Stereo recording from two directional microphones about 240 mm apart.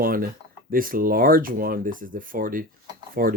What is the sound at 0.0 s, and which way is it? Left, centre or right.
Speech, right.